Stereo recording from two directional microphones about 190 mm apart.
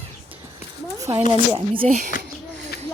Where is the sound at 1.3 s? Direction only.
30° right (ahead or behind).